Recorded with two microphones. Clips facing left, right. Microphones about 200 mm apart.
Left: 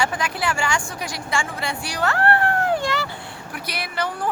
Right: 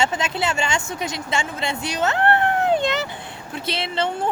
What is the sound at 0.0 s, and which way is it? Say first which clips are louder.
A woman's voice: right 2 dB; 25° right (ahead or behind).